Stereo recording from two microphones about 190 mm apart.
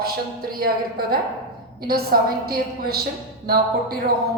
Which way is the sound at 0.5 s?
50° right (ahead or behind).